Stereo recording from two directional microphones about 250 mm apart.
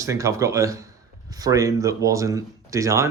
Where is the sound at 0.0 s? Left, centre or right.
Centre.